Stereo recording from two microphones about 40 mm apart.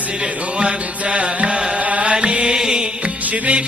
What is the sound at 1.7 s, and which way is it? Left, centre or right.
Music, right.